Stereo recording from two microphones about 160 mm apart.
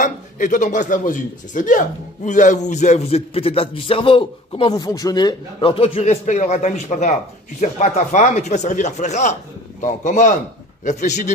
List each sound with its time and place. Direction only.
0.0 s speech: 55° left (ahead or behind)